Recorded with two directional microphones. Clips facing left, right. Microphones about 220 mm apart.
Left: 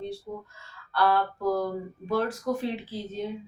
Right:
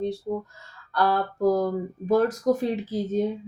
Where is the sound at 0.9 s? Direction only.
45° right (ahead or behind).